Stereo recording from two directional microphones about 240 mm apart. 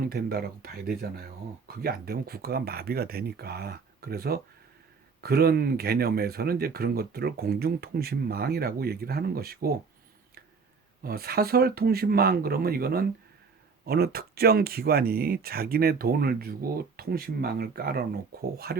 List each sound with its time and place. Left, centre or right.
0.0 s speech: right
11.0 s speech: right